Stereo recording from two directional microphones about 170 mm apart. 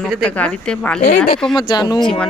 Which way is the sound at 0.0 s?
5° left (ahead or behind).